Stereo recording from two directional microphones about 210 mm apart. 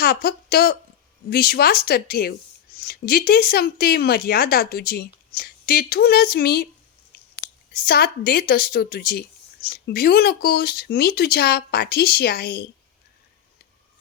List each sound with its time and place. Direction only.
0.0 s a woman's voice: 45° left (ahead or behind)
7.7 s a woman's voice: 45° left (ahead or behind)